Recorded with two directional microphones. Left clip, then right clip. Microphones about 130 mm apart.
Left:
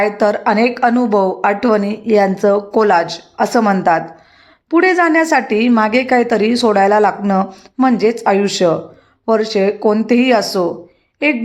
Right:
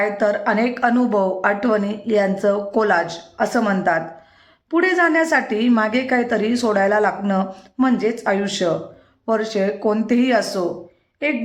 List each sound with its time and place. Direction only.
0.0 s a woman's voice: 30° left (ahead or behind)